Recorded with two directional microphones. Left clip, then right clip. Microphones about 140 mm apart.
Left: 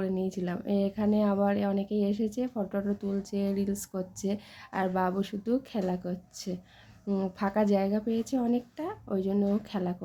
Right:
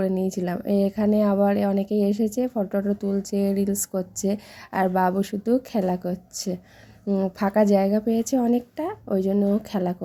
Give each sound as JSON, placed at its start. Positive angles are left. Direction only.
{"t": 0.0, "sound": "a woman's voice", "side_deg": -35}